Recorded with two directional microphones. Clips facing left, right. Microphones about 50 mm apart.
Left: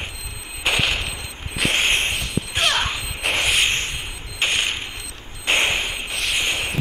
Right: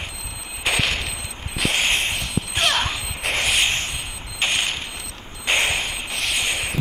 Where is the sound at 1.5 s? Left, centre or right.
Left.